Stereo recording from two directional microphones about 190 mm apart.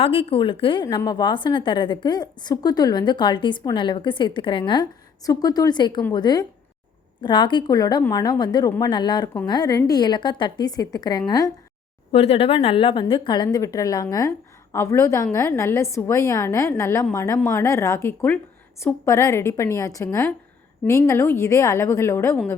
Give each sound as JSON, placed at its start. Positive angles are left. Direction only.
{"t": 0.0, "sound": "a woman's voice", "side_deg": 30}
{"t": 12.1, "sound": "a woman's voice", "side_deg": 30}